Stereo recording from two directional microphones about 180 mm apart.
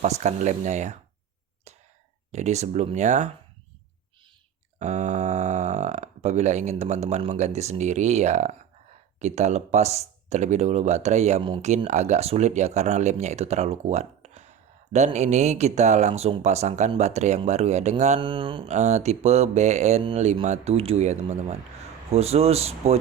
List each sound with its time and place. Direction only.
0.0 s speech: 40° right (ahead or behind)
2.3 s speech: 40° right (ahead or behind)
4.8 s speech: 40° right (ahead or behind)
18.2 s mantra: 25° right (ahead or behind)
18.7 s speech: 40° right (ahead or behind)